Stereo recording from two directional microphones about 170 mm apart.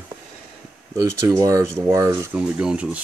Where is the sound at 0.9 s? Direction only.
20° right (ahead or behind).